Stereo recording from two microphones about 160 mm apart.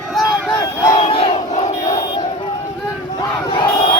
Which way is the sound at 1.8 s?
30° left (ahead or behind).